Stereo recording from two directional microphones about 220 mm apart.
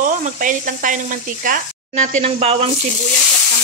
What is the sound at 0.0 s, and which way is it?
Speech, 35° right (ahead or behind).